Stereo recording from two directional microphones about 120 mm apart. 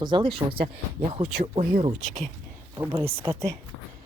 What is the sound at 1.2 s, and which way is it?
Speech, 85° right.